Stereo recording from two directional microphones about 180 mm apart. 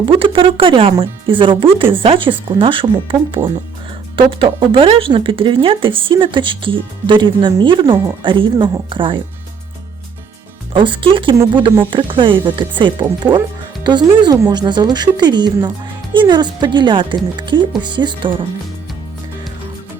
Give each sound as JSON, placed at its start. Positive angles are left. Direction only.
{"t": 0.0, "sound": "speech", "side_deg": -30}
{"t": 10.8, "sound": "speech", "side_deg": -25}